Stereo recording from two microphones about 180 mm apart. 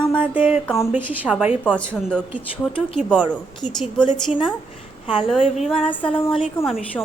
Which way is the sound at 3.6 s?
45° right (ahead or behind).